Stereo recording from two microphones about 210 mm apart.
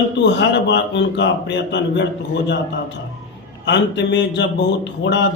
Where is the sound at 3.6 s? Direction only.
55° left (ahead or behind).